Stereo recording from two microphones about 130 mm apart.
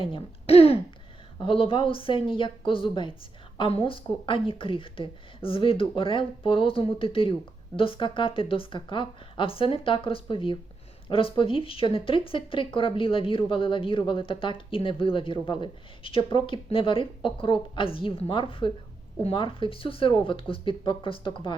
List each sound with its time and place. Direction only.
0.0 s a woman's voice: 40° left (ahead or behind)